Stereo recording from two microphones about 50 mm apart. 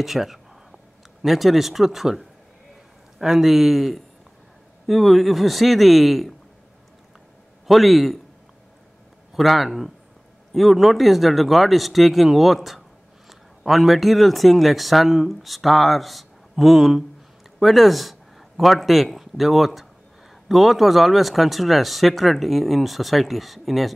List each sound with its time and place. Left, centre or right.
0.0 s a sound: centre
1.2 s speech: centre
7.6 s speech: centre
9.3 s speech: centre